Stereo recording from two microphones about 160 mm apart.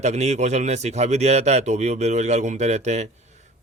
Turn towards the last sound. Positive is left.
turn(degrees=-45)  # may be behind; listen again after turning